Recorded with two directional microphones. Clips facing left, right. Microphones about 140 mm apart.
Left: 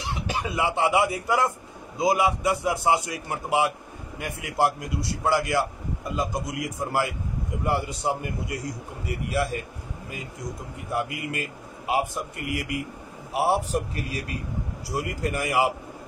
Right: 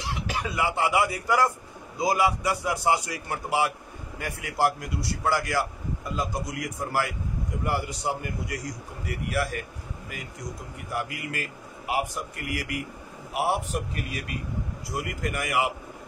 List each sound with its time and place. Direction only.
0.1 s a man's voice: 25° left (ahead or behind)